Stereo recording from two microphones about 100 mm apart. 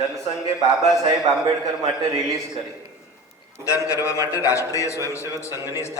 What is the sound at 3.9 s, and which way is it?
Speech, 30° left (ahead or behind).